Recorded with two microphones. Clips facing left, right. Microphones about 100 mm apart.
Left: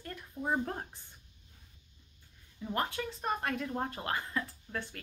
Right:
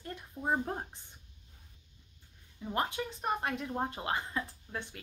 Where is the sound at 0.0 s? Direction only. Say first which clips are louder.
Right 1 dB; 20° right (ahead or behind).